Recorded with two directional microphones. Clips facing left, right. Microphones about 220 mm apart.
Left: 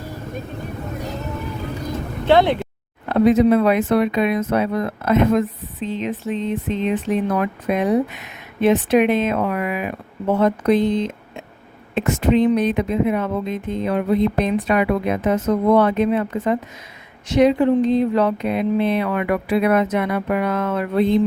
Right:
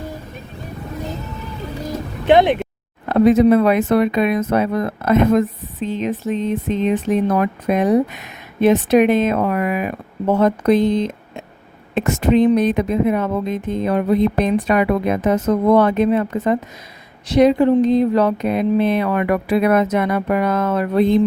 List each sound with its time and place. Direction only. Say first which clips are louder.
2.2 s speech: right 2 dB; 20° right (ahead or behind)
3.1 s speech: right 2 dB; 45° right (ahead or behind)